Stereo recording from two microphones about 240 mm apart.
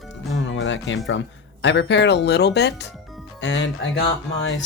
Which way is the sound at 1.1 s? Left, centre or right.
Left.